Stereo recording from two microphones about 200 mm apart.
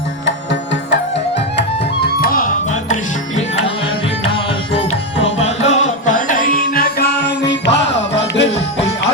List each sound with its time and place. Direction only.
2.0 s music: 45° left (ahead or behind)
4.7 s music: 30° left (ahead or behind); by 8.6 s 60° left (ahead or behind)